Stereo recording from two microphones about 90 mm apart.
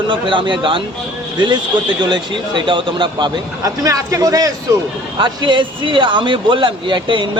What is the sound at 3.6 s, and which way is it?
Speech, 40° right (ahead or behind).